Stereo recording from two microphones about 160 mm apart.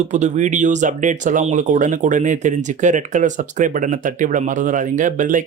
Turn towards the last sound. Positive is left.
turn(degrees=-55)  # may be behind; listen again after turning